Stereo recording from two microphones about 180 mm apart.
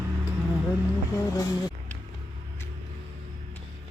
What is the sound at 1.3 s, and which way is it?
Speech, 20° left (ahead or behind).